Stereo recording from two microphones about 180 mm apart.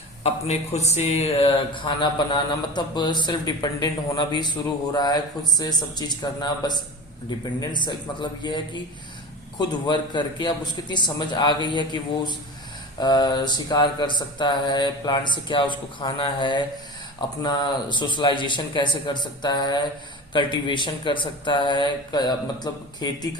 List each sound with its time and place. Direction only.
0.2 s speech: 35° left (ahead or behind)